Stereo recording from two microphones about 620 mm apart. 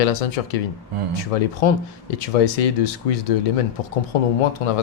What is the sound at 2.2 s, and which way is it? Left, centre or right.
Speech, left.